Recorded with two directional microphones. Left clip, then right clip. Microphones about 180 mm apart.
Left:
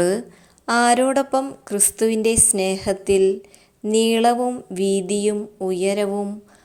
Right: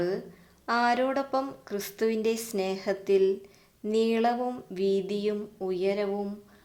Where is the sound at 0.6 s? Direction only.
25° left (ahead or behind).